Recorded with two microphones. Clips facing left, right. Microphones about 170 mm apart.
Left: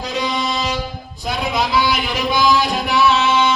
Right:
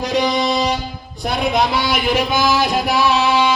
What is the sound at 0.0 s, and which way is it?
Music, 75° right (ahead or behind).